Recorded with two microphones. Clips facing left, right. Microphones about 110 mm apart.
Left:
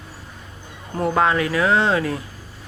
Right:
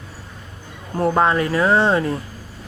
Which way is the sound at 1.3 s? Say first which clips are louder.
Right 2 dB; 35° right (ahead or behind).